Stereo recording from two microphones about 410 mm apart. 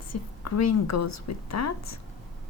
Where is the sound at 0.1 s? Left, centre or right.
Left.